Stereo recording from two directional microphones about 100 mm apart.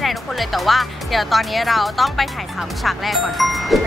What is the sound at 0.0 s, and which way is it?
Speech, centre (ahead or behind).